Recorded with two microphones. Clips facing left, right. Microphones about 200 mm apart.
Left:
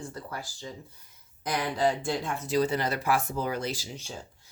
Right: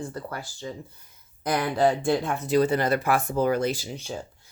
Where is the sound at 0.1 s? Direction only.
60° right (ahead or behind).